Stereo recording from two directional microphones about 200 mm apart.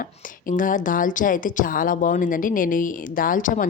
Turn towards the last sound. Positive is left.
turn(degrees=40)  # may be behind; listen again after turning